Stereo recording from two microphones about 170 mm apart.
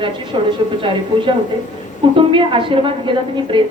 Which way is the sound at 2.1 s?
30° right (ahead or behind).